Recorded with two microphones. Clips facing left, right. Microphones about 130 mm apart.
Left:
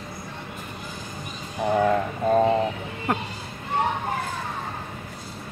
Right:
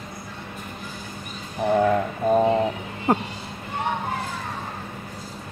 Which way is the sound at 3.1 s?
30° right (ahead or behind).